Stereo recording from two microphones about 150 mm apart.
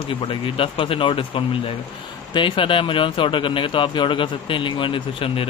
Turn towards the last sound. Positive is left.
turn(degrees=35)  # may be behind; listen again after turning